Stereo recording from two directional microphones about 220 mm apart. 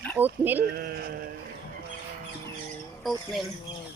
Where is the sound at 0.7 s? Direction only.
45° right (ahead or behind).